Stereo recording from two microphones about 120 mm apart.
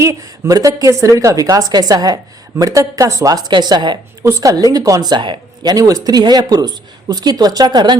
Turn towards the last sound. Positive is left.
turn(degrees=-35)  # may be behind; listen again after turning